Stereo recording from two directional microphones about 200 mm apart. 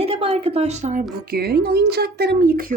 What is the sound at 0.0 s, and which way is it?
Speech, 30° right (ahead or behind).